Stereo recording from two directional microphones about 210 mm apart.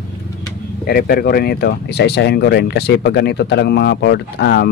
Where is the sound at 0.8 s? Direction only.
45° left (ahead or behind).